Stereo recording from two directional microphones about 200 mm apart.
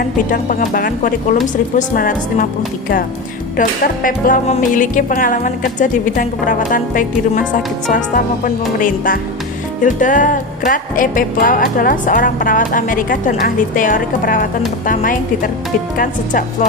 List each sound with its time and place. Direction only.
0.3 s speech: 40° left (ahead or behind)
3.6 s music: 40° left (ahead or behind)
14.8 s speech: 40° left (ahead or behind)
16.0 s music: 40° left (ahead or behind)